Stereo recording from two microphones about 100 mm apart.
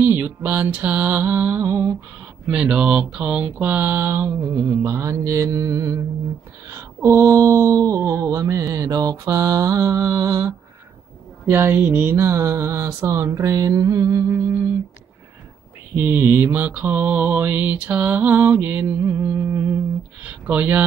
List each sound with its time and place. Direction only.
0.0 s mantra: 20° right (ahead or behind)
2.4 s mantra: 10° right (ahead or behind); by 14.4 s 30° right (ahead or behind)
15.9 s mantra: 20° right (ahead or behind)
20.2 s speech: 15° right (ahead or behind)